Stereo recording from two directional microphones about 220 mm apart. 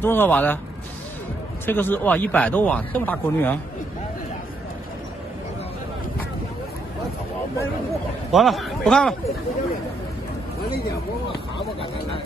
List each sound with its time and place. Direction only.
0.0 s speech: 10° left (ahead or behind)
1.7 s speech: 10° left (ahead or behind)
8.3 s a man's voice: centre (ahead or behind)
11.2 s speech: 25° left (ahead or behind)